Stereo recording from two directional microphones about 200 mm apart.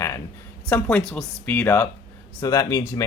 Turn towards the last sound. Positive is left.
turn(degrees=15)  # may be behind; listen again after turning